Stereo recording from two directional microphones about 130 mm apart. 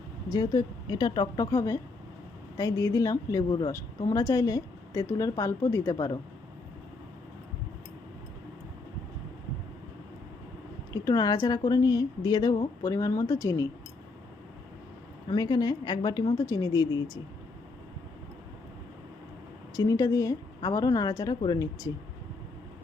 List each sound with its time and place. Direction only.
0.3 s a woman's voice: 30° left (ahead or behind)
10.9 s a woman's voice: 25° left (ahead or behind)
15.3 s a woman's voice: 30° left (ahead or behind)
19.7 s a woman's voice: 25° left (ahead or behind)